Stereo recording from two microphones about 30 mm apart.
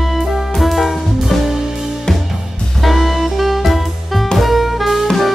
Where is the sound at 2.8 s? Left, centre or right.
Centre.